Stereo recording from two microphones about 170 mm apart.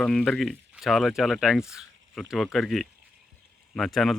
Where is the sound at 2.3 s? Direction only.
Centre (ahead or behind).